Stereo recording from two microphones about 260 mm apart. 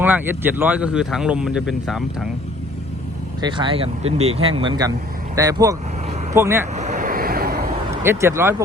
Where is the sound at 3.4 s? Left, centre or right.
Centre.